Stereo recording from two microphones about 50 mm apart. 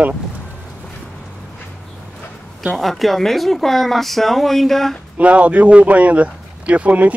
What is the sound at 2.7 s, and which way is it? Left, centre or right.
Speech, centre.